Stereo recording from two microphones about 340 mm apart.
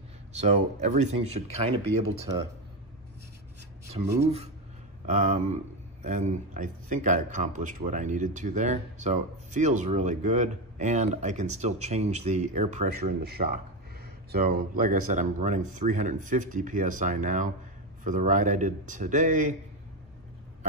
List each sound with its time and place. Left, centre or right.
0.4 s speech: right
4.2 s speech: centre